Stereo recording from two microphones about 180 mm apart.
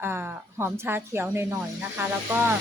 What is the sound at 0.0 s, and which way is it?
Speech, 10° right (ahead or behind).